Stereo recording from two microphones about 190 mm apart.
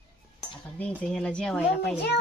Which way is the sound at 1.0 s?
5° left (ahead or behind).